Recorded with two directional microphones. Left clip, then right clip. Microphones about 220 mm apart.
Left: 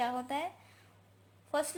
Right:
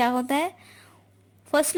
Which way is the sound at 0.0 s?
50° right (ahead or behind).